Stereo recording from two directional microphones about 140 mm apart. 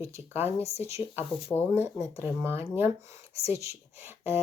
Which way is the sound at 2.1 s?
15° right (ahead or behind).